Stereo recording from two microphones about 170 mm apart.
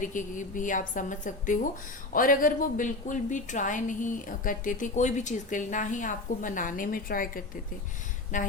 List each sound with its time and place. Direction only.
0.0 s a woman's voice: 50° left (ahead or behind)